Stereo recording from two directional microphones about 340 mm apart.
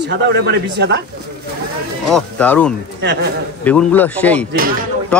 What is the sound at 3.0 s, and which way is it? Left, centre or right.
Speech, right.